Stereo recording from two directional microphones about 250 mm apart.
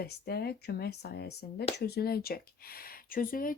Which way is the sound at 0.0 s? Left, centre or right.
Left.